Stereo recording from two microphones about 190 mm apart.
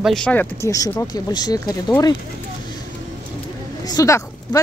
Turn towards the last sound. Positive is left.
turn(degrees=20)  # may be behind; listen again after turning